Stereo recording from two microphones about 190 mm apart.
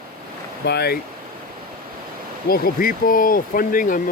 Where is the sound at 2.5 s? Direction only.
50° left (ahead or behind).